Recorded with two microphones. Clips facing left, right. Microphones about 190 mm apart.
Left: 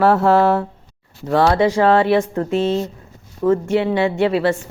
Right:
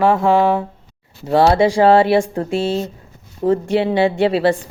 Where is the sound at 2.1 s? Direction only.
30° right (ahead or behind).